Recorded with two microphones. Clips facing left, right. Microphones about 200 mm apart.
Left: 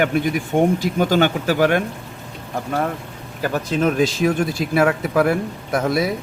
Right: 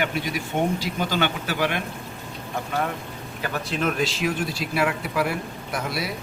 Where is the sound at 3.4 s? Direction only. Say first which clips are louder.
Left 7 dB; 40° left (ahead or behind).